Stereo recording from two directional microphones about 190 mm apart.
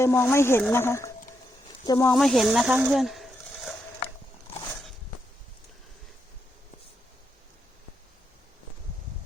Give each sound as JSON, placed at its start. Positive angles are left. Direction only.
{"t": 0.0, "sound": "speech", "side_deg": 10}
{"t": 2.1, "sound": "speech", "side_deg": 0}